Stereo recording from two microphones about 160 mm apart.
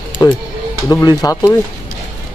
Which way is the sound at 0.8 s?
20° left (ahead or behind).